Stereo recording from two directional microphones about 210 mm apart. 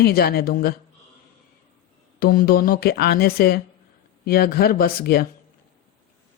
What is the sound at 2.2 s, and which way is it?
Speech, 45° left (ahead or behind).